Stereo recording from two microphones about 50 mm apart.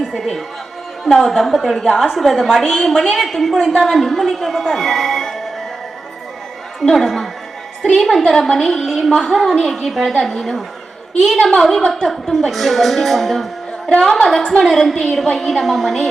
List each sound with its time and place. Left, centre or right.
1.0 s a woman's voice: centre
2.6 s a woman's voice: centre
6.9 s a woman's voice: centre
14.9 s a woman's voice: centre